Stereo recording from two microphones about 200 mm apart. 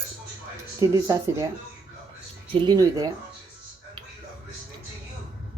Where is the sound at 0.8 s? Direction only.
15° right (ahead or behind).